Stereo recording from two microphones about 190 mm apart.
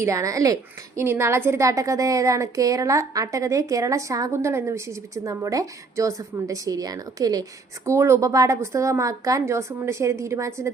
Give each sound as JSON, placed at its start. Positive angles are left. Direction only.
{"t": 0.0, "sound": "a woman's voice", "side_deg": -15}